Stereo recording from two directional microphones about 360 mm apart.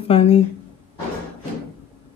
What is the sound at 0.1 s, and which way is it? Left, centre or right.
Speech, centre.